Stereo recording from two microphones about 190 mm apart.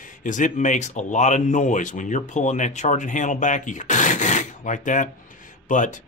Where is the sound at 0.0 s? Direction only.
45° left (ahead or behind).